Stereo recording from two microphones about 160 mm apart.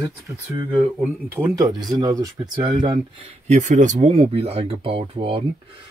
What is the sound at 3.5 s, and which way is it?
Speech, 50° right (ahead or behind).